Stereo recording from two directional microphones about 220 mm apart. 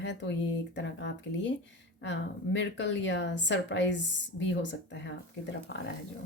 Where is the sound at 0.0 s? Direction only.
55° left (ahead or behind).